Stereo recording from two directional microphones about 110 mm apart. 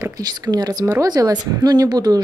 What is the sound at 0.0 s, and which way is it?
Speech, 35° right (ahead or behind).